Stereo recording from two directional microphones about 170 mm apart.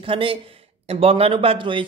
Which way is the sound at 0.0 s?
30° right (ahead or behind).